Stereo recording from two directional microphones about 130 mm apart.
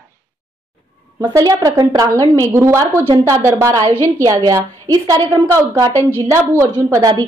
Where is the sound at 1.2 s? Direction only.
25° right (ahead or behind).